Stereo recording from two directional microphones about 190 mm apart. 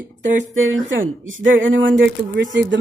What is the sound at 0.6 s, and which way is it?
A woman's voice, 90° right.